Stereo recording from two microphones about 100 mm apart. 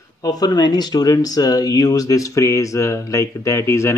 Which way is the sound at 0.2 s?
40° left (ahead or behind).